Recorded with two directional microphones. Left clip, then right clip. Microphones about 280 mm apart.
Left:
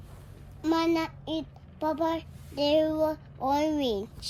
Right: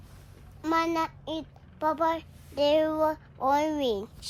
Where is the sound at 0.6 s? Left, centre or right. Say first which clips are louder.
Even; centre.